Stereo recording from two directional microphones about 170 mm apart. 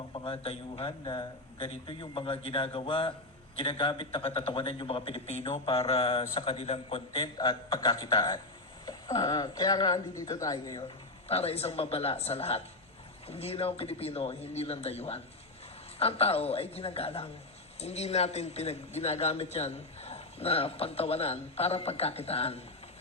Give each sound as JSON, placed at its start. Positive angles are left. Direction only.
{"t": 0.1, "sound": "a man's voice", "side_deg": 35}
{"t": 11.3, "sound": "a man's voice", "side_deg": 35}